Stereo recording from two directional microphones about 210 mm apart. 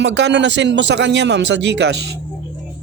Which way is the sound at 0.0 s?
55° right (ahead or behind).